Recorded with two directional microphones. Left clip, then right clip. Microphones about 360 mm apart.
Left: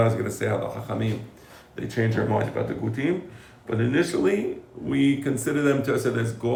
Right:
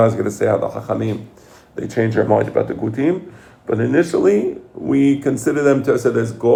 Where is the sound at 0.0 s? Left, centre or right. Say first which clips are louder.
Right 9 dB; centre.